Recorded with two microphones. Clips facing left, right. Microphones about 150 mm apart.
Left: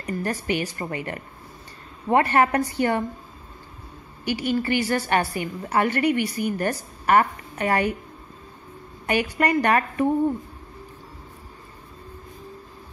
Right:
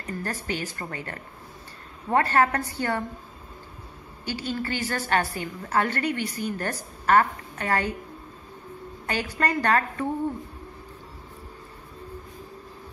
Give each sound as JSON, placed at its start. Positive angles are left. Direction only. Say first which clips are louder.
{"t": 0.0, "sound": "a woman's voice", "louder": "left 5 dB", "side_deg": 15}
{"t": 4.2, "sound": "a woman's voice", "louder": "left 6 dB", "side_deg": 15}
{"t": 9.0, "sound": "a woman's voice", "louder": "left 5 dB", "side_deg": 15}